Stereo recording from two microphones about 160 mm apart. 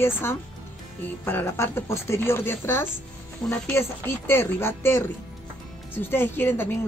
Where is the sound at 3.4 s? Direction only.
5° left (ahead or behind).